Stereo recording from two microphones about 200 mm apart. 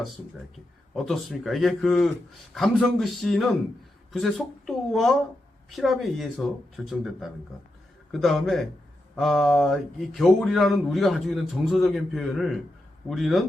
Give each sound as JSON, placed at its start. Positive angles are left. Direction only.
{"t": 0.9, "sound": "speech", "side_deg": 0}